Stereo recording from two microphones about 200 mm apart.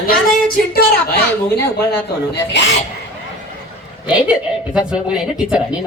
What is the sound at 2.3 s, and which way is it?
Speech, 60° left (ahead or behind).